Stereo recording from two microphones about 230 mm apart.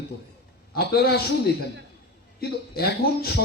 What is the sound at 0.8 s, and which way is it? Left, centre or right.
Speech, left.